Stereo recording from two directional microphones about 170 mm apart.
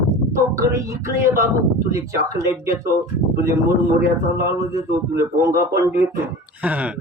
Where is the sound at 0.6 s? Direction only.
15° right (ahead or behind).